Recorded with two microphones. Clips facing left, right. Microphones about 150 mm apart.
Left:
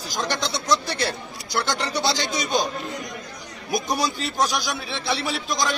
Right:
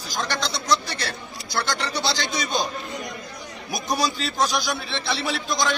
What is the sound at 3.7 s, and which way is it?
Speech, 20° left (ahead or behind).